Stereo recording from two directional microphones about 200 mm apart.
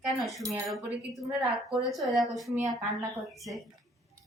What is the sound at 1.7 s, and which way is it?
Speech, centre (ahead or behind).